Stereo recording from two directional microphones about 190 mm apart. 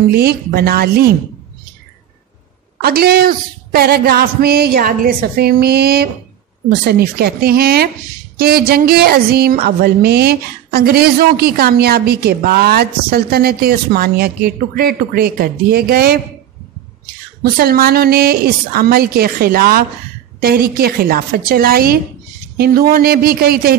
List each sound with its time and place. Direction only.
0.1 s a woman's voice: 55° right (ahead or behind)
2.8 s a woman's voice: 55° right (ahead or behind)